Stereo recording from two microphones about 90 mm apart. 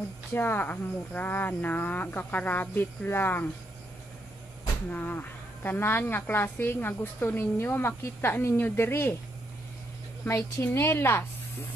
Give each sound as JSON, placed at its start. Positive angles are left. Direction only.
{"t": 0.3, "sound": "a woman's voice", "side_deg": 25}
{"t": 4.9, "sound": "a woman's voice", "side_deg": 20}
{"t": 10.2, "sound": "a woman's voice", "side_deg": 30}